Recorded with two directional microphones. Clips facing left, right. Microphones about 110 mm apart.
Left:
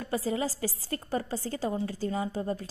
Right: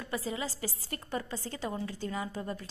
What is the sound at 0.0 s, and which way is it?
A woman's voice, 40° left (ahead or behind).